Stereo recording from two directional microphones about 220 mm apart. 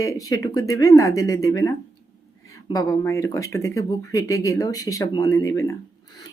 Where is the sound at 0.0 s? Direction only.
15° left (ahead or behind).